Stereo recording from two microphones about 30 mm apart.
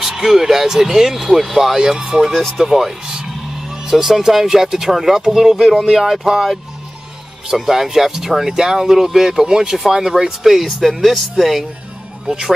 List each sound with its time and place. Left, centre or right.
0.0 s speech: centre
2.0 s speech: right
2.5 s music: centre
3.9 s speech: centre
7.5 s speech: centre
9.5 s speech: right
9.8 s speech: centre
10.6 s speech: centre
12.3 s speech: centre